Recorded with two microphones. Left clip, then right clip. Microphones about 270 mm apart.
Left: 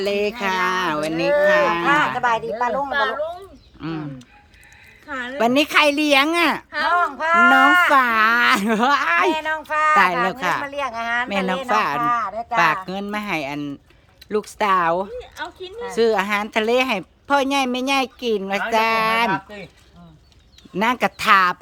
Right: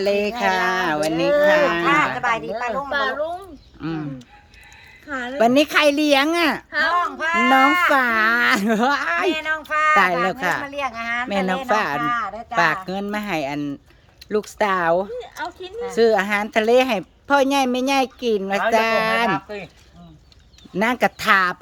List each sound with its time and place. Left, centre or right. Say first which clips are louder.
0.0 s speech: right 2 dB; centre
1.8 s a woman's voice: left 1 dB; left
2.9 s a sound: left 1 dB; centre
3.8 s speech: right 1 dB; centre
5.0 s speech: right 2 dB; centre
7.2 s a sound: left 3 dB; centre
7.9 s speech: left 2 dB; centre
9.3 s a sound: even; centre
10.4 s speech: left 1 dB; centre
10.7 s a woman's voice: left 1 dB; centre
11.3 s speech: even; centre
11.9 s a woman's voice: left 2 dB; centre
12.5 s speech: left 1 dB; centre
20.7 s speech: even; centre